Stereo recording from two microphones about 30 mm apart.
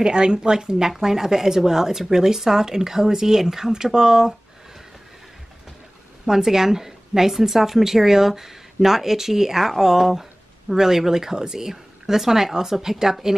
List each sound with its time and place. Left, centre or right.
0.0 s a woman's voice: right
6.2 s a woman's voice: centre